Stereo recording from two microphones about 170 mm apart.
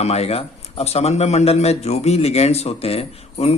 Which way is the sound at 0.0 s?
40° left (ahead or behind).